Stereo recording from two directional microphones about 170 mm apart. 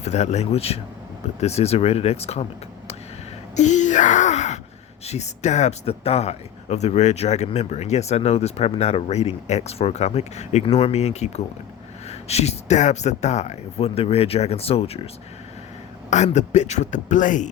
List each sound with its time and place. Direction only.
0.0 s speech: 40° left (ahead or behind)
3.5 s a sound: 45° left (ahead or behind)
5.0 s speech: 40° left (ahead or behind)
16.0 s a man's voice: 45° left (ahead or behind)